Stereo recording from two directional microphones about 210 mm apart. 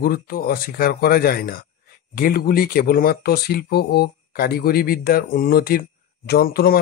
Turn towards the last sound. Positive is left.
turn(degrees=45)  # may be behind; listen again after turning